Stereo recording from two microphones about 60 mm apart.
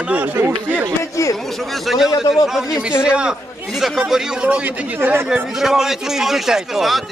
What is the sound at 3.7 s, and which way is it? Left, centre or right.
A man's voice, centre.